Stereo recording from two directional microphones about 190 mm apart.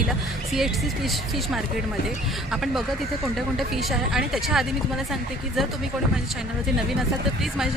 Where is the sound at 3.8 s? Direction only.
5° right (ahead or behind).